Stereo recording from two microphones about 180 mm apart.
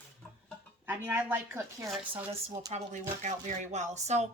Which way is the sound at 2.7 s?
35° right (ahead or behind).